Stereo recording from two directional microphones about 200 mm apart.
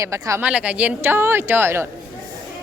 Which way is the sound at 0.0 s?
15° right (ahead or behind).